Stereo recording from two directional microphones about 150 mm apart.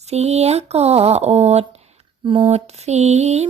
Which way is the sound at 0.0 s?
45° right (ahead or behind).